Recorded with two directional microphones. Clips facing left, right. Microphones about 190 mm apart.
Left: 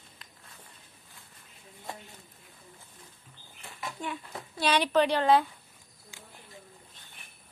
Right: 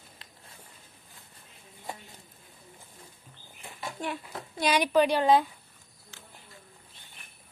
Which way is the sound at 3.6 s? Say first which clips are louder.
Right 1 dB; 15° right (ahead or behind).